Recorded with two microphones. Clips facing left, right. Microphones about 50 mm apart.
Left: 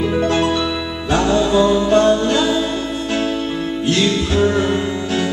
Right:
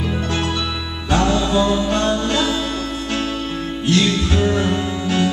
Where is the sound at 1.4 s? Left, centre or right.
Centre.